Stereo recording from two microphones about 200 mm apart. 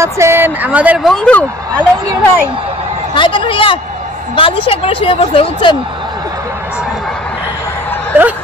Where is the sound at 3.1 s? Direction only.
25° left (ahead or behind).